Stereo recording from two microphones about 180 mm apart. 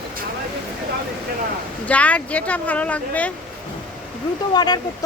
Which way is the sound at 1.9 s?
10° left (ahead or behind).